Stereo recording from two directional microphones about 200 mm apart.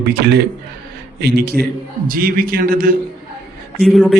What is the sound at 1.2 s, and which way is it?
A man's voice, 55° right (ahead or behind).